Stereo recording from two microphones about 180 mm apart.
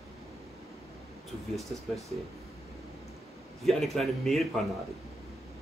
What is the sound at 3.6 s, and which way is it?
Speech, centre (ahead or behind).